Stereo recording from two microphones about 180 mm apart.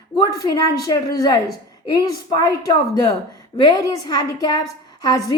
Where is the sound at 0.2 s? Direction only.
20° left (ahead or behind).